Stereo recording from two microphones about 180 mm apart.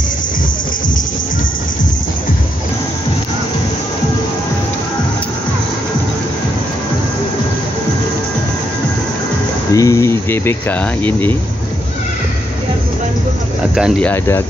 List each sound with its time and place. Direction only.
9.7 s cricket: 15° left (ahead or behind)
11.1 s speech: 10° left (ahead or behind)
14.0 s speech: 15° left (ahead or behind)